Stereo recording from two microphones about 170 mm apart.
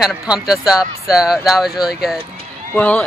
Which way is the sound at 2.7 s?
10° left (ahead or behind).